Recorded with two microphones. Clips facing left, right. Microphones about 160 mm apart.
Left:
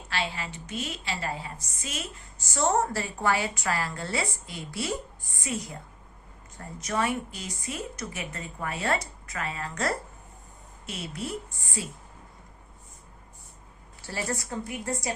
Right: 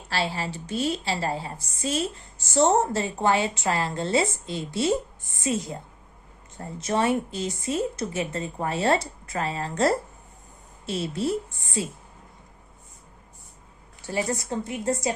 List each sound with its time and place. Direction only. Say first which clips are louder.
0.1 s a woman's voice: right 4 dB; 35° right (ahead or behind)
14.1 s a woman's voice: right 5 dB; 20° right (ahead or behind)